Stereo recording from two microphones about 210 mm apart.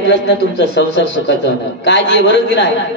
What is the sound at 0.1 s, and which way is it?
A man's voice, 55° left (ahead or behind).